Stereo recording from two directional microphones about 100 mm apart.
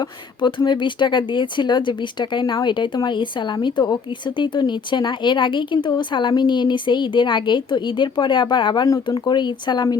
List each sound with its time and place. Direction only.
0.4 s speech: 50° left (ahead or behind)